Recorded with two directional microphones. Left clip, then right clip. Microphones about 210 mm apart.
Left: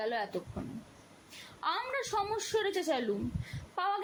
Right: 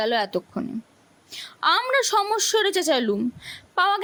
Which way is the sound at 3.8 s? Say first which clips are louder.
Right 12 dB; 55° right (ahead or behind).